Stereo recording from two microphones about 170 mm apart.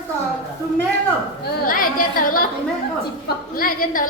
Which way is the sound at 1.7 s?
55° left (ahead or behind).